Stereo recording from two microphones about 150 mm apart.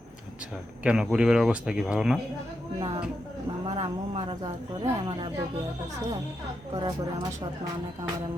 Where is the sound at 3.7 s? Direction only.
40° right (ahead or behind).